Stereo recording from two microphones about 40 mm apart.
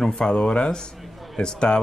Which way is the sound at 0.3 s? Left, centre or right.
Left.